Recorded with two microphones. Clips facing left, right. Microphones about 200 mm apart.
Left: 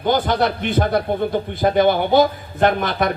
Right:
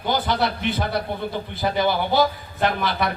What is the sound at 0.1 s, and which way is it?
A man's voice, 50° left (ahead or behind).